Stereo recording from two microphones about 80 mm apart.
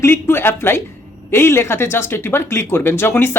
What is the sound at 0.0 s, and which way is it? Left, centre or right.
Speech, left.